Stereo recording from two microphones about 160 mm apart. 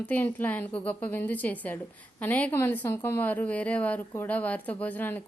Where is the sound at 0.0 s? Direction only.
10° left (ahead or behind).